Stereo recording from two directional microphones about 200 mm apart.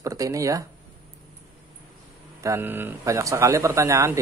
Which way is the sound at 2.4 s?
10° right (ahead or behind).